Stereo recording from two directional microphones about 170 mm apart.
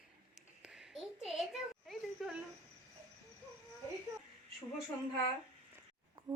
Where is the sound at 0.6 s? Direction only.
5° right (ahead or behind).